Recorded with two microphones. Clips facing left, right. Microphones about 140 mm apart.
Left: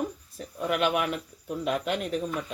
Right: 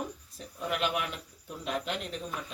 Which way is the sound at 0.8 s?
60° left (ahead or behind).